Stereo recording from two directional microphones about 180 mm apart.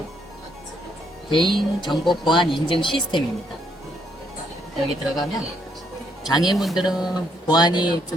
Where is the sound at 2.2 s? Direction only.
25° left (ahead or behind).